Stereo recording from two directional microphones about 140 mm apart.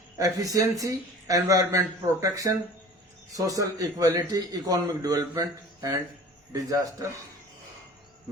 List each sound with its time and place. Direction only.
0.2 s a man's voice: 25° right (ahead or behind)